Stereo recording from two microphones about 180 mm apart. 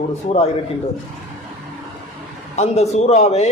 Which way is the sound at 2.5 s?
40° left (ahead or behind).